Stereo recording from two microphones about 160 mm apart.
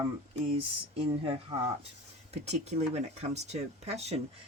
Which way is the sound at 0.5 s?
35° right (ahead or behind).